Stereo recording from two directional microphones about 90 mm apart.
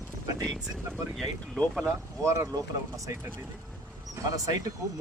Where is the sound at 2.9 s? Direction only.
40° right (ahead or behind).